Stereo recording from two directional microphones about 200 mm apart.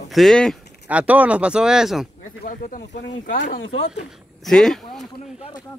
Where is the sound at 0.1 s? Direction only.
Centre (ahead or behind).